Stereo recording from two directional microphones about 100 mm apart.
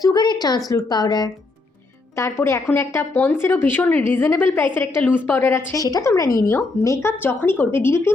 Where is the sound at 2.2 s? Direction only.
25° left (ahead or behind).